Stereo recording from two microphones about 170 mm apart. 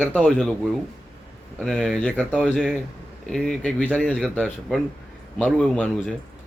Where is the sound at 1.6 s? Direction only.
Centre (ahead or behind).